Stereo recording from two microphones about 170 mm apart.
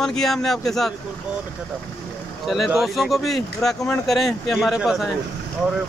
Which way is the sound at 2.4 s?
Centre (ahead or behind).